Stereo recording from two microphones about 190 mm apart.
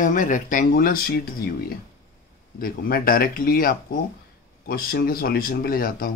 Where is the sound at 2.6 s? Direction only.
50° left (ahead or behind).